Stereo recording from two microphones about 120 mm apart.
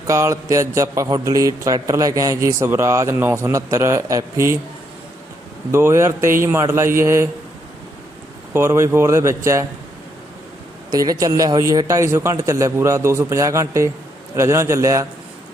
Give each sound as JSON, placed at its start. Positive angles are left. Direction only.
{"t": 0.1, "sound": "speech", "side_deg": -25}
{"t": 5.7, "sound": "speech", "side_deg": -20}
{"t": 8.5, "sound": "speech", "side_deg": -20}
{"t": 10.9, "sound": "speech", "side_deg": -30}